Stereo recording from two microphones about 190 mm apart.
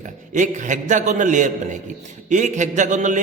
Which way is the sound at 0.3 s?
40° right (ahead or behind).